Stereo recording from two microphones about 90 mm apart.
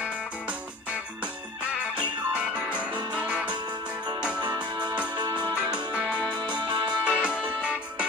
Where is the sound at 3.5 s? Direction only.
50° right (ahead or behind).